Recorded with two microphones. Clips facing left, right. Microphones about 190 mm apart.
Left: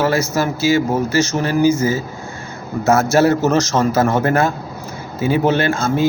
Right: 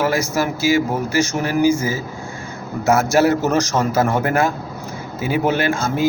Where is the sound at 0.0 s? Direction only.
15° right (ahead or behind).